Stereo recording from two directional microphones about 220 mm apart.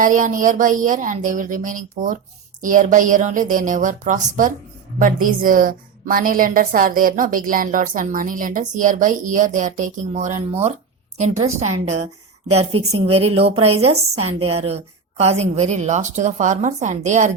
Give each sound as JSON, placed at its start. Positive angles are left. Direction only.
{"t": 0.0, "sound": "a woman's voice", "side_deg": -35}